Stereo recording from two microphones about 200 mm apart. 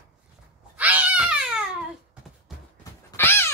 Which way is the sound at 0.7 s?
10° right (ahead or behind).